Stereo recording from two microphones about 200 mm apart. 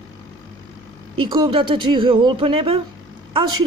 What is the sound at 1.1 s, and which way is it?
A man's voice, 25° right (ahead or behind).